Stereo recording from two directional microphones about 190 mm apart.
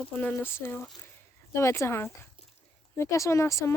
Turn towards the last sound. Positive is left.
turn(degrees=15)  # may be behind; listen again after turning